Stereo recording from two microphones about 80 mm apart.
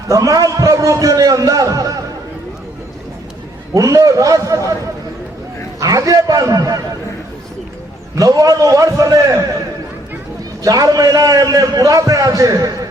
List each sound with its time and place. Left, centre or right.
0.1 s a man's voice: right
3.8 s a man's voice: right
5.8 s a man's voice: right
8.1 s a man's voice: right
10.6 s a man's voice: right